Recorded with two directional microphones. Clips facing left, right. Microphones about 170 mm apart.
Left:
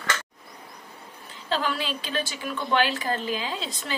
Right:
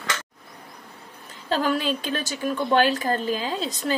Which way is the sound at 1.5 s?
45° right (ahead or behind).